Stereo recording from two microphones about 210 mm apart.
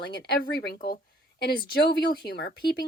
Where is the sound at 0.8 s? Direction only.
45° left (ahead or behind).